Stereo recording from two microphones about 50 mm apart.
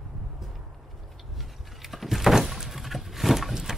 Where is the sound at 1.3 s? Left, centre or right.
Centre.